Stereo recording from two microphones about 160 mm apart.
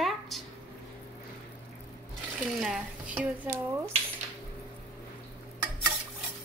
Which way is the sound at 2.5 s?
5° right (ahead or behind).